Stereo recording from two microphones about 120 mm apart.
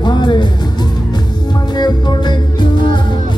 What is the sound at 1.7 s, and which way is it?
Music, 35° left (ahead or behind).